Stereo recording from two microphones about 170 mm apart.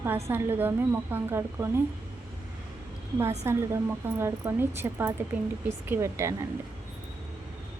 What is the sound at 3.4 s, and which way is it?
Speech, 15° right (ahead or behind).